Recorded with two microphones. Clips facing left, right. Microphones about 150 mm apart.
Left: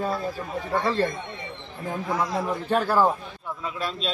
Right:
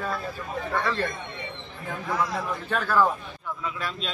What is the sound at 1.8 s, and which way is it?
Speech, 20° left (ahead or behind).